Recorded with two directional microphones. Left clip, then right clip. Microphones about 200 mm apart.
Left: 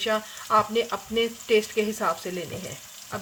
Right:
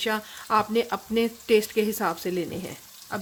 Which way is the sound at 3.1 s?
55° right (ahead or behind).